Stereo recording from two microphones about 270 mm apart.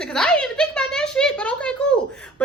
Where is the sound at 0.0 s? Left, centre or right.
Centre.